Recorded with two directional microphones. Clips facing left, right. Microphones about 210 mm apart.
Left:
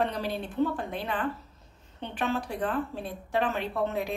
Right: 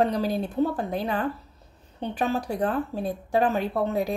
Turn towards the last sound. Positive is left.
turn(degrees=-40)  # may be behind; listen again after turning